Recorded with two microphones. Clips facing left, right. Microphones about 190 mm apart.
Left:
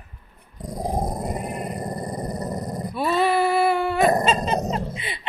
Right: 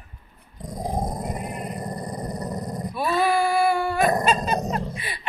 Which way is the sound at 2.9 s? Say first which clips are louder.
Left 1 dB; 25° left (ahead or behind).